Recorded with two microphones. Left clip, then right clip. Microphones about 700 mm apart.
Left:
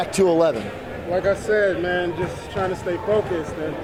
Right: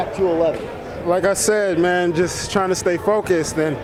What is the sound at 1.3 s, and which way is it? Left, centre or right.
Speech, right.